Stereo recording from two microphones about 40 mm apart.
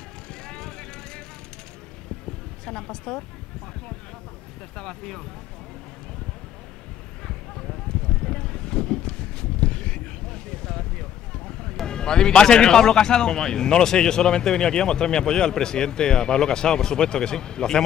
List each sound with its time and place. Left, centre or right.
0.3 s vehicle: left
2.6 s speech: centre
4.7 s speech: centre
7.2 s a sound: centre
11.8 s speech: centre